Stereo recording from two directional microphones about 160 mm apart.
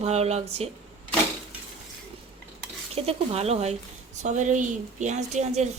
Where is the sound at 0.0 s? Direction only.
40° right (ahead or behind).